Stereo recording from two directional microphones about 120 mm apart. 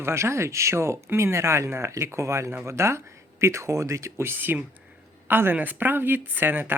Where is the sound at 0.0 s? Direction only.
20° right (ahead or behind).